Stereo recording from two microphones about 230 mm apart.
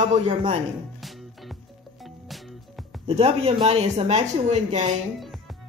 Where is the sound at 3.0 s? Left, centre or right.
Right.